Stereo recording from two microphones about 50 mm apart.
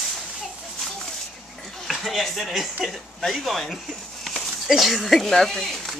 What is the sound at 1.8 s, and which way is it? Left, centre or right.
Speech, centre.